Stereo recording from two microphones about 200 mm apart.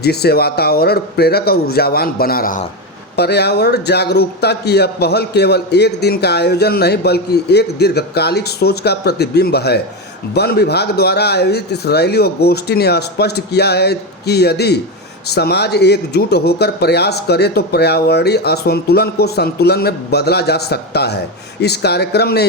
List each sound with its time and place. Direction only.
0.0 s a man's voice: 55° left (ahead or behind)
3.2 s a man's voice: 55° left (ahead or behind)